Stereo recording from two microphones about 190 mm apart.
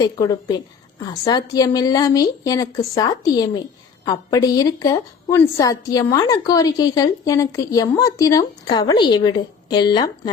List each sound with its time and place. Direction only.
0.0 s a woman's voice: 20° left (ahead or behind)